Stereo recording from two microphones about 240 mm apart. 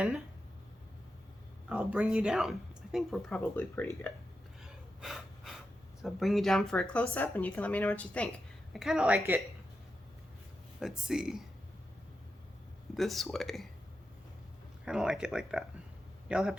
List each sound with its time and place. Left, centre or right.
1.7 s speech: centre
4.6 s breathing: centre
6.0 s speech: centre
10.8 s speech: centre
12.9 s speech: centre
14.8 s speech: centre